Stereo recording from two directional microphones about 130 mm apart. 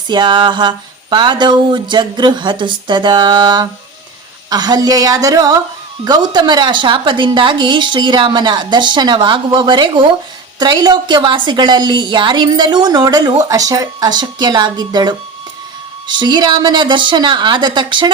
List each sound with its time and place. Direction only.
0.1 s a woman's voice: 35° right (ahead or behind)